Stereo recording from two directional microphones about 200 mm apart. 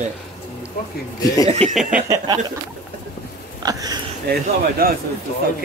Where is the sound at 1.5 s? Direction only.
30° right (ahead or behind).